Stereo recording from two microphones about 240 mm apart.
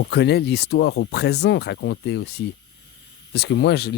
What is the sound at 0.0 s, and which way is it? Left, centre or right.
Speech, left.